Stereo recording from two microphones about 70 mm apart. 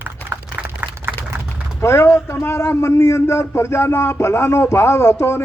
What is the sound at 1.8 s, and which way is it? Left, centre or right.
A man's voice, left.